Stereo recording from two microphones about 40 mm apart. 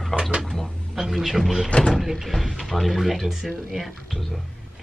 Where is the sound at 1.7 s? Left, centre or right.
Left.